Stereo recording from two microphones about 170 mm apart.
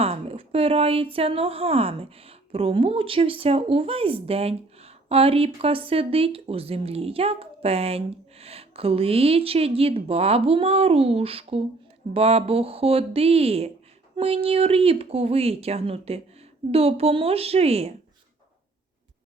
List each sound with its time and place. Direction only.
0.0 s speech: 35° right (ahead or behind)